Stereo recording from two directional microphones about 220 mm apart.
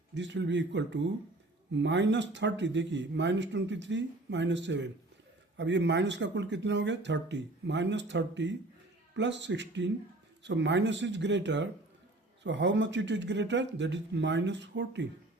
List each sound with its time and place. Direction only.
0.1 s speech: 55° right (ahead or behind)